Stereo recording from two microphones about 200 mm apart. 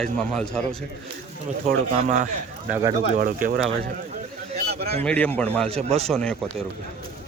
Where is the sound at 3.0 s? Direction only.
40° right (ahead or behind).